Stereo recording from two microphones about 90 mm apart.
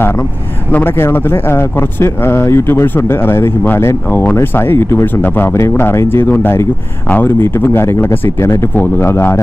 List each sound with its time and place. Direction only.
0.7 s speech: 20° left (ahead or behind)